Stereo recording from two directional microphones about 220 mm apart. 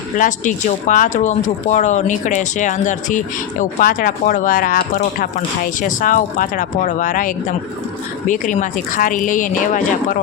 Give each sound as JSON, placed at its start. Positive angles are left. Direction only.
{"t": 0.2, "sound": "speech", "side_deg": 35}